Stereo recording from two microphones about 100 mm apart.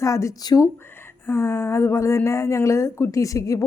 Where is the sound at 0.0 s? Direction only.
30° left (ahead or behind).